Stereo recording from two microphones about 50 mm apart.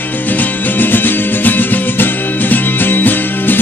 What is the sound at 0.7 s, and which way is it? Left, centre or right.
Music, left.